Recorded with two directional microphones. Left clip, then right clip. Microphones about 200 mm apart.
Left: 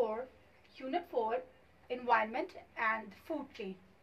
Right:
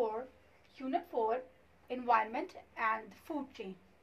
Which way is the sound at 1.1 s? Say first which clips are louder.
Even; 25° right (ahead or behind).